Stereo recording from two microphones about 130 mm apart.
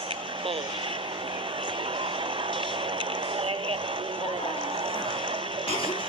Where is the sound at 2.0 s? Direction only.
40° right (ahead or behind).